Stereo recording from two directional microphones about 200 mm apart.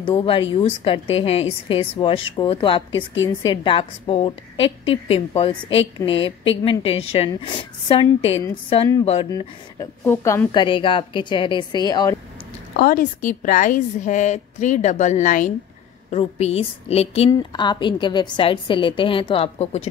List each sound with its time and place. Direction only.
0.0 s a woman's voice: 25° left (ahead or behind)
9.3 s a woman's voice: 15° left (ahead or behind)
12.7 s a woman's voice: 45° left (ahead or behind)